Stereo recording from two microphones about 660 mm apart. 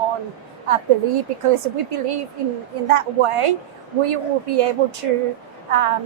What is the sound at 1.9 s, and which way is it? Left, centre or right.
A woman's voice, right.